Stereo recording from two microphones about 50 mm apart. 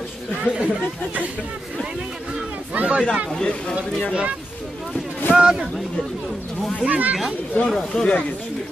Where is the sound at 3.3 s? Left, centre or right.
Centre.